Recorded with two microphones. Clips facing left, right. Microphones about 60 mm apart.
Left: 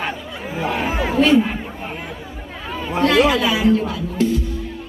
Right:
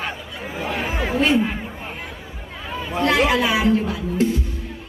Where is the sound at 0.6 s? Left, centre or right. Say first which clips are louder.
Left 4 dB; centre.